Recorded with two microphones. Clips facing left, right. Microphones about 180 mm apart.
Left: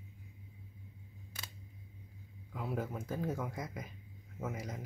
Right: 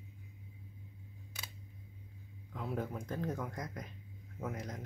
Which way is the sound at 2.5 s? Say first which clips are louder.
Even; 5° left (ahead or behind).